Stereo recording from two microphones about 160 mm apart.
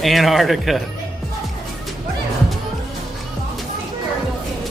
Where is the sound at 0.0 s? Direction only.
Centre (ahead or behind).